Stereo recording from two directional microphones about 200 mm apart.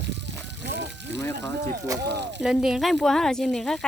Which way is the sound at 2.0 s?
60° right (ahead or behind).